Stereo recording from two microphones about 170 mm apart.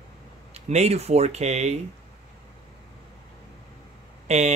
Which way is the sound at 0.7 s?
40° right (ahead or behind).